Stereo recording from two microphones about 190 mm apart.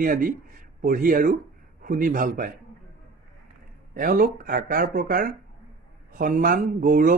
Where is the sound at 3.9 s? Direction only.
50° right (ahead or behind).